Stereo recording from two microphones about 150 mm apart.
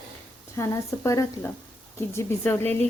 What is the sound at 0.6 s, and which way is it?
Speech, 20° left (ahead or behind).